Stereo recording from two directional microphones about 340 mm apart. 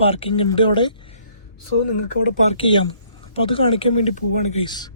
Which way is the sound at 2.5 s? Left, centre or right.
Centre.